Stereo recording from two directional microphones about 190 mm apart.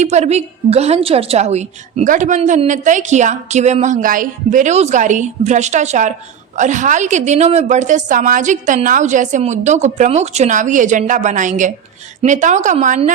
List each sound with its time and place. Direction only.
0.0 s a woman's voice: 35° right (ahead or behind)